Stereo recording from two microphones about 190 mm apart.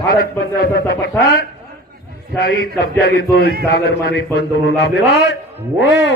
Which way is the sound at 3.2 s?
55° left (ahead or behind).